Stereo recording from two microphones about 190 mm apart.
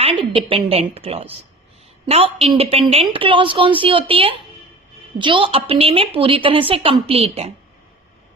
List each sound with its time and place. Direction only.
0.0 s a woman's voice: 30° right (ahead or behind)